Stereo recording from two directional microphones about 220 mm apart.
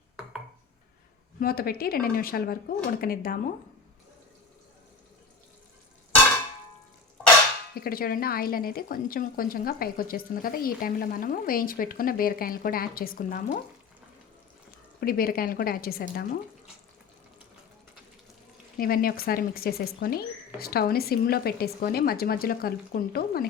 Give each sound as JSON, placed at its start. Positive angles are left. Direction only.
{"t": 1.4, "sound": "speech", "side_deg": 45}
{"t": 7.8, "sound": "speech", "side_deg": 40}
{"t": 15.0, "sound": "speech", "side_deg": 40}
{"t": 18.8, "sound": "speech", "side_deg": 40}